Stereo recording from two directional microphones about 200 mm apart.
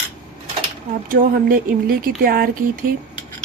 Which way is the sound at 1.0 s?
45° right (ahead or behind).